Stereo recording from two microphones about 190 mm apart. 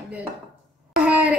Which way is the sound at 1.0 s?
5° right (ahead or behind).